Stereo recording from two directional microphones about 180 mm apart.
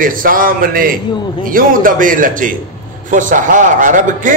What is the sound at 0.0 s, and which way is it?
A man's voice, 50° right (ahead or behind).